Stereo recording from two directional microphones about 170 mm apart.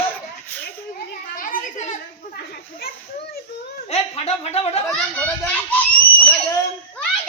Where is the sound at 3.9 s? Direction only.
40° left (ahead or behind).